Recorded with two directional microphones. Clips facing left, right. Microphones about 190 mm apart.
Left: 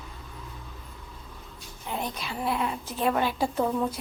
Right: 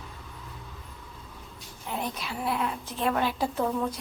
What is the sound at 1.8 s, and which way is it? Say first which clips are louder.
A woman's voice: even; 5° right (ahead or behind).